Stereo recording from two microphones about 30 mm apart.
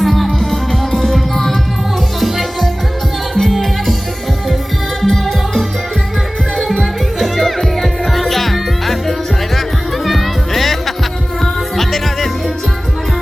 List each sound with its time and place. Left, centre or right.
0.0 s music: centre
0.3 s music: centre
3.3 s music: centre
5.0 s music: centre
7.2 s music: centre